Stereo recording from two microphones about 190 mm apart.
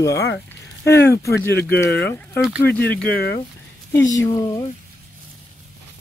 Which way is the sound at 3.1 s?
55° left (ahead or behind).